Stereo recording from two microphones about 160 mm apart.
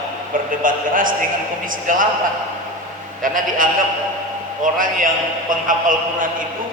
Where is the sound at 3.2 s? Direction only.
60° right (ahead or behind).